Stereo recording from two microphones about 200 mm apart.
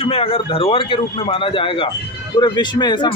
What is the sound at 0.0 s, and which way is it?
A man's voice, 30° left (ahead or behind).